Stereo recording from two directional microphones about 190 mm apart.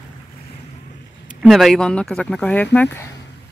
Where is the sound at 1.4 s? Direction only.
Centre (ahead or behind).